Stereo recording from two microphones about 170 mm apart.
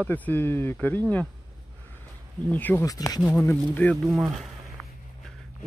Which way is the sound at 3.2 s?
10° left (ahead or behind).